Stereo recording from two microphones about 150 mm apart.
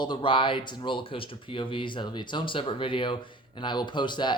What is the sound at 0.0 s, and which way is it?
Speech, 30° left (ahead or behind).